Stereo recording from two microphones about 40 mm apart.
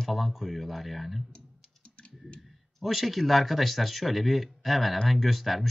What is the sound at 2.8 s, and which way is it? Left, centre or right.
Speech, centre.